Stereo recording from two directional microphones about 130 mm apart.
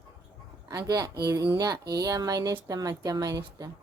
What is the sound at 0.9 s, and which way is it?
Speech, 30° right (ahead or behind).